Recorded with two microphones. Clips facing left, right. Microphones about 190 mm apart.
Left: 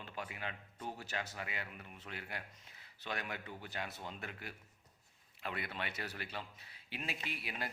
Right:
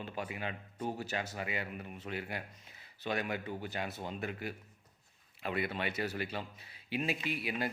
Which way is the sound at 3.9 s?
35° right (ahead or behind).